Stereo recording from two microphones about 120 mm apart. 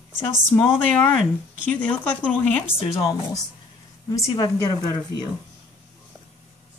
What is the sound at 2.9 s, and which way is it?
A woman's voice, 30° left (ahead or behind).